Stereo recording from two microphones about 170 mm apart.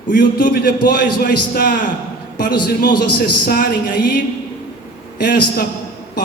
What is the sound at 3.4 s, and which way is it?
Speech, 55° left (ahead or behind).